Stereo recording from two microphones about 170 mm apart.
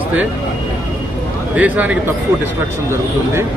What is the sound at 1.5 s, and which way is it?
Speech, 10° right (ahead or behind).